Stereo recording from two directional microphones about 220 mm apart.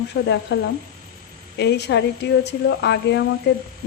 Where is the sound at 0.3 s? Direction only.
55° left (ahead or behind).